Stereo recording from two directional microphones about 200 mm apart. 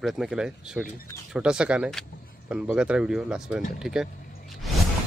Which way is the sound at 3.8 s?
Centre (ahead or behind).